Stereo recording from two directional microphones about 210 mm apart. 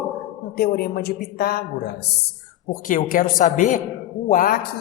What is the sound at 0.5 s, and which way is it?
Speech, 50° left (ahead or behind).